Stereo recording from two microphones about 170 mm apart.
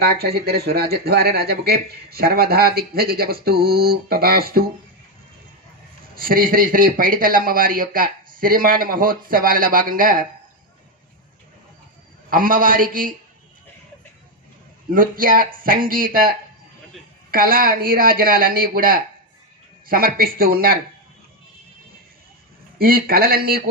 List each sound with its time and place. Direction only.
0.0 s speech: 70° right (ahead or behind)
6.1 s speech: 55° right (ahead or behind)
12.3 s a man's voice: 55° right (ahead or behind)
14.8 s speech: 55° right (ahead or behind)
17.3 s speech: 60° right (ahead or behind)
22.8 s speech: 60° right (ahead or behind)